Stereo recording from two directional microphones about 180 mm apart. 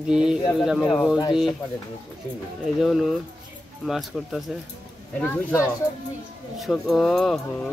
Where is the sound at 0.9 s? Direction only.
Centre (ahead or behind).